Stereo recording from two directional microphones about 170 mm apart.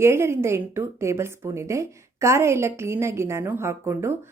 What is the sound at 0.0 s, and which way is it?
A woman's voice, 15° right (ahead or behind).